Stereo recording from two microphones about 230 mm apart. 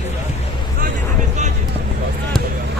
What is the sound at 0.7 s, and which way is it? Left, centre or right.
Vehicle, right.